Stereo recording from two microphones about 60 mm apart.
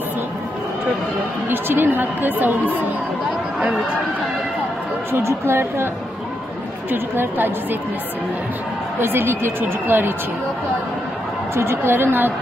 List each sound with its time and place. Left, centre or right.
1.5 s a woman's voice: right
3.5 s speech: centre
5.5 s a woman's voice: right
6.9 s a woman's voice: right
9.0 s a woman's voice: right
11.5 s a woman's voice: right